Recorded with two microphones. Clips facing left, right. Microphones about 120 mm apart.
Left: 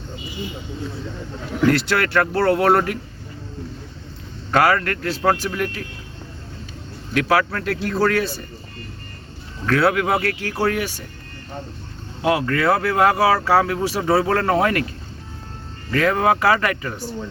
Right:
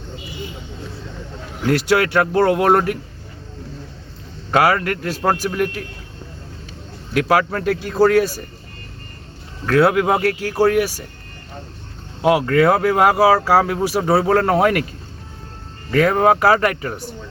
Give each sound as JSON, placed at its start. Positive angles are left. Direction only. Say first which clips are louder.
{"t": 1.7, "sound": "speech", "louder": "right 3 dB", "side_deg": -10}
{"t": 4.5, "sound": "speech", "louder": "right 1 dB", "side_deg": -10}
{"t": 7.3, "sound": "speech", "louder": "right 3 dB", "side_deg": -15}
{"t": 9.7, "sound": "speech", "louder": "right 4 dB", "side_deg": -15}
{"t": 12.2, "sound": "speech", "louder": "right 5 dB", "side_deg": -15}
{"t": 15.9, "sound": "speech", "louder": "right 3 dB", "side_deg": -30}